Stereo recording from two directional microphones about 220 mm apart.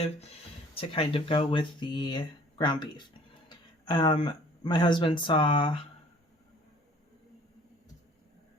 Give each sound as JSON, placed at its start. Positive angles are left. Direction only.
{"t": 0.7, "sound": "speech", "side_deg": 25}